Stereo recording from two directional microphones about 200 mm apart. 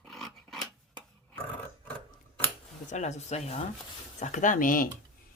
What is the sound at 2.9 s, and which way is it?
Speech, 35° left (ahead or behind).